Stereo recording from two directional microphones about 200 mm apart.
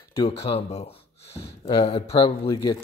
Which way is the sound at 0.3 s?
30° left (ahead or behind).